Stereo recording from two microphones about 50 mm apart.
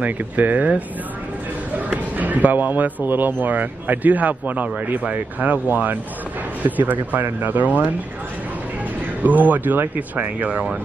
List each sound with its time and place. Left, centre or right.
0.0 s speech: right
2.1 s speech: right
9.2 s speech: right